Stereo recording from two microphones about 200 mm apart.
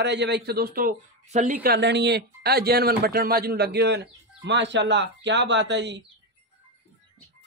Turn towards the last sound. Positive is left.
turn(degrees=-60)  # may be behind; listen again after turning